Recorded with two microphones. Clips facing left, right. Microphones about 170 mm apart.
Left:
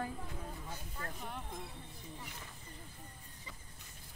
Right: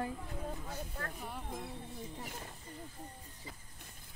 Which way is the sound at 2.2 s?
45° right (ahead or behind).